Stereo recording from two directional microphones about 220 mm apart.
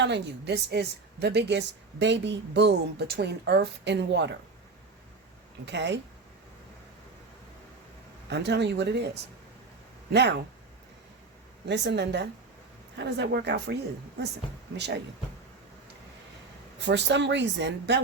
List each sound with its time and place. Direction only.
0.0 s a woman's voice: 50° right (ahead or behind)
5.6 s a woman's voice: 50° right (ahead or behind)
8.3 s a woman's voice: 50° right (ahead or behind)
11.7 s a woman's voice: 55° right (ahead or behind)
16.8 s a woman's voice: 55° right (ahead or behind)